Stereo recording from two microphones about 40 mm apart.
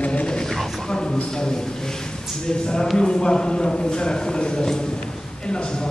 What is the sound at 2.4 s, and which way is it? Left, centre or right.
A man's voice, centre.